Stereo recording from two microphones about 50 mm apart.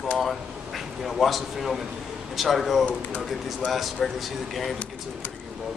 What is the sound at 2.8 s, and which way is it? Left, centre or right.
Speech, left.